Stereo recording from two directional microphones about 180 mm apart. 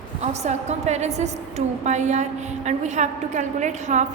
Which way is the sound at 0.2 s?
40° right (ahead or behind).